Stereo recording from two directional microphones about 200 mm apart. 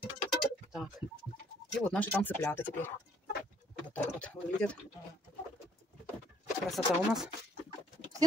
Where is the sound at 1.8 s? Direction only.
5° left (ahead or behind).